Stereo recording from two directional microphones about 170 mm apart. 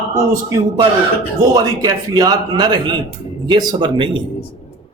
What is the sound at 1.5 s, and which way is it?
A man's voice, 20° right (ahead or behind).